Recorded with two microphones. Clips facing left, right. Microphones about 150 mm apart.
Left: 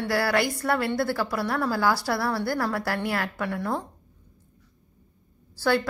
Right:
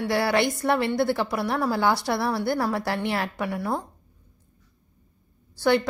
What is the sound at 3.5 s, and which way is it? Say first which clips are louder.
Speech: right 1 dB; 10° right (ahead or behind).